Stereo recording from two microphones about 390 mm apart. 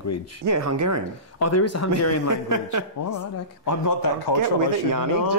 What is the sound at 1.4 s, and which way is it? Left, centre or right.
Speech, left.